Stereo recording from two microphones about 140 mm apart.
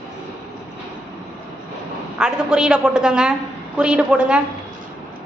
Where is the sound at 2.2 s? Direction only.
5° right (ahead or behind).